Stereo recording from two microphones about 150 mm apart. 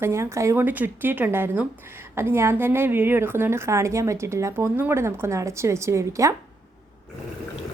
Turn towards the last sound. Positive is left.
turn(degrees=-20)  # may be behind; listen again after turning